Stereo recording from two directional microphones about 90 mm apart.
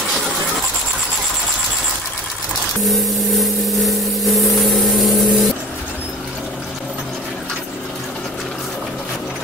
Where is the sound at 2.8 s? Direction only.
Centre (ahead or behind).